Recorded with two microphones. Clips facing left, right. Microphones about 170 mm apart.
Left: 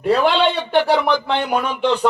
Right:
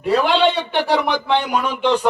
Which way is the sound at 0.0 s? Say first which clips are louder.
Even; 55° left (ahead or behind).